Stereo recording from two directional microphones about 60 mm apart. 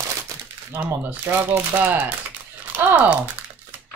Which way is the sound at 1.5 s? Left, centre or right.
Right.